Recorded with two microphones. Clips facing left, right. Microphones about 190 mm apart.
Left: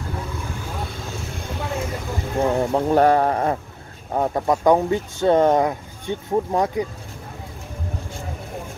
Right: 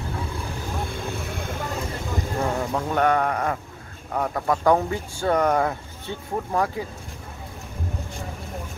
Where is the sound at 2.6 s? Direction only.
35° left (ahead or behind).